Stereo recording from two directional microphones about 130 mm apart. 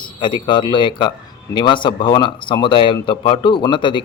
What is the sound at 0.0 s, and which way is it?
Speech, 35° left (ahead or behind).